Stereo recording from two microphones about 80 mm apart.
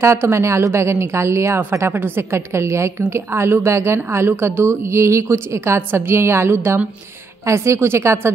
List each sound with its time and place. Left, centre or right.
0.0 s speech: right